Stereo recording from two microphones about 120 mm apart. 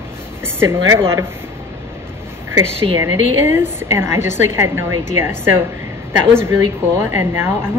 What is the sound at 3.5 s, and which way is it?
Speech, 20° right (ahead or behind).